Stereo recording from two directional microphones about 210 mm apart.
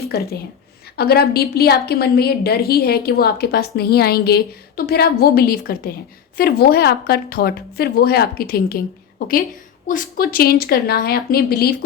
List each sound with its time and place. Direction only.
0.0 s a woman's voice: 50° left (ahead or behind)